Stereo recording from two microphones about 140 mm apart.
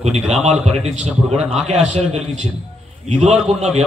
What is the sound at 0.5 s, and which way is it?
A man's voice, 50° right (ahead or behind).